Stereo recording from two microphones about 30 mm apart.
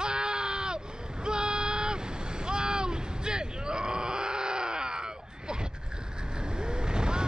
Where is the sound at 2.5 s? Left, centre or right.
Right.